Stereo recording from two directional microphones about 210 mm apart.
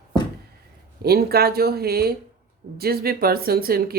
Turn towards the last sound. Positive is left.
turn(degrees=-45)  # may be behind; listen again after turning